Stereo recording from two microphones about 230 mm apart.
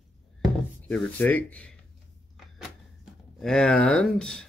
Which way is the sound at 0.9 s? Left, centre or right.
Centre.